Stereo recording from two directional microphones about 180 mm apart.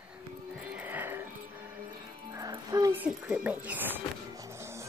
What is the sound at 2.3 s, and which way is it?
Speech, 20° right (ahead or behind).